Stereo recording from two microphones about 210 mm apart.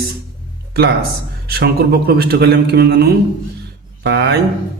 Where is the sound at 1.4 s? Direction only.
45° right (ahead or behind).